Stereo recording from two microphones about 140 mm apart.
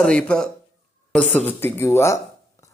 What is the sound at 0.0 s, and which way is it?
Speech, 5° left (ahead or behind).